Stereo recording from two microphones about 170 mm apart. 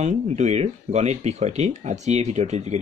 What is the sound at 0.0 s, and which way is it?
Speech, 45° right (ahead or behind).